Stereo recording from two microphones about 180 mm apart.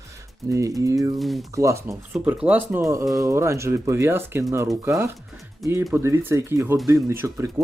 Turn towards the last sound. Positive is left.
turn(degrees=-15)  # may be behind; listen again after turning